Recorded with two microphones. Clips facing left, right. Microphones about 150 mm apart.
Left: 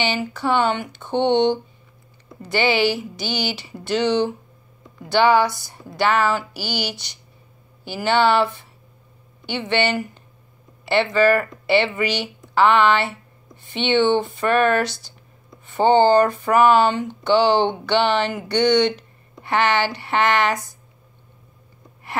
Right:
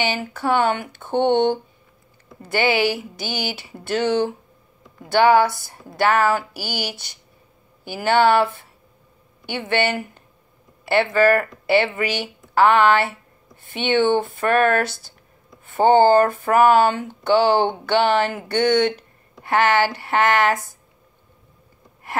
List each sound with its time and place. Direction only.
0.3 s speech: 50° right (ahead or behind)
9.5 s speech: 50° right (ahead or behind)
22.1 s gasp: 45° right (ahead or behind)